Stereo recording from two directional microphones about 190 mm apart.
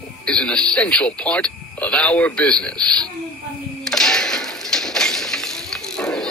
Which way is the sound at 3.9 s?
5° left (ahead or behind).